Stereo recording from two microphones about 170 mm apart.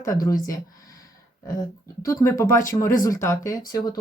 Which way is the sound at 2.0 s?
15° left (ahead or behind).